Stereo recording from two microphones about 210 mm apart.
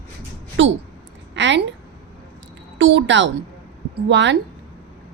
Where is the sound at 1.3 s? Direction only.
60° right (ahead or behind).